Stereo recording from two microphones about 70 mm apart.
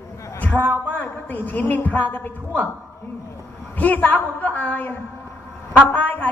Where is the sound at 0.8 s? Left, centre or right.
Left.